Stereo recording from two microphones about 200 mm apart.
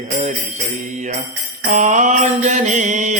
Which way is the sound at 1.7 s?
40° right (ahead or behind).